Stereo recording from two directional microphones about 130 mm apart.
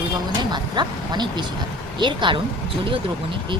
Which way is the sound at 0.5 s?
35° right (ahead or behind).